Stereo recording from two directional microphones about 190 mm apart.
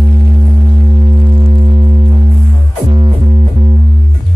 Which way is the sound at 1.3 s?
35° right (ahead or behind).